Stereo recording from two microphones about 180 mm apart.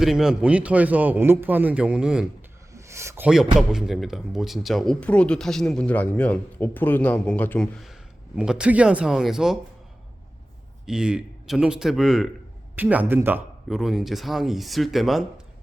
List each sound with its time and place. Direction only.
0.0 s a man's voice: centre (ahead or behind)
2.7 s a sound: 15° right (ahead or behind)
3.2 s speech: 5° right (ahead or behind)
8.4 s speech: 5° right (ahead or behind)
10.8 s speech: 5° right (ahead or behind)